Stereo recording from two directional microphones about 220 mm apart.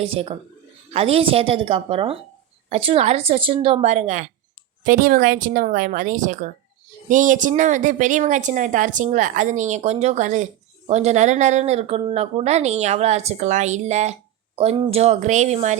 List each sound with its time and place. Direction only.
0.0 s a woman's voice: 25° right (ahead or behind)